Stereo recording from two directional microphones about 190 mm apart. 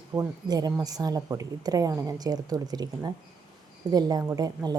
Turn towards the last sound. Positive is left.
turn(degrees=-20)  # may be behind; listen again after turning